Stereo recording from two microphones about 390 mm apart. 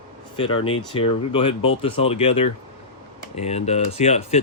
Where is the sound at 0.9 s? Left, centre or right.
Centre.